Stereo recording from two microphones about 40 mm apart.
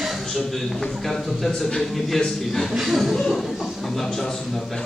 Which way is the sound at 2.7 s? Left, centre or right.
Centre.